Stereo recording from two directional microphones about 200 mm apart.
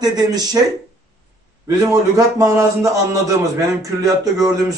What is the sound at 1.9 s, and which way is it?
Speech, 15° right (ahead or behind).